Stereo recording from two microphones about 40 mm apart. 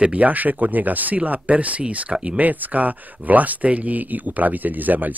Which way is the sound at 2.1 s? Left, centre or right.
Right.